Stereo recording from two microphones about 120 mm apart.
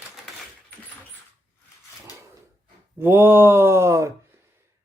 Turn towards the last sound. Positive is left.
turn(degrees=-25)  # may be behind; listen again after turning